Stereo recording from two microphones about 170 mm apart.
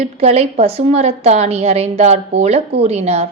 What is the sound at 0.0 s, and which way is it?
A woman's voice, 40° right (ahead or behind).